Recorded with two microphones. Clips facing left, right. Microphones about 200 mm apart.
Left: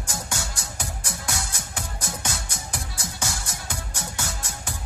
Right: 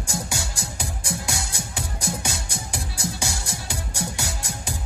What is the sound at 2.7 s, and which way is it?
Music, 10° right (ahead or behind).